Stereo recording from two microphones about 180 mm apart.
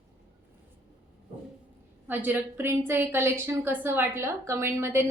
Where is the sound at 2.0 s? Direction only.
10° right (ahead or behind).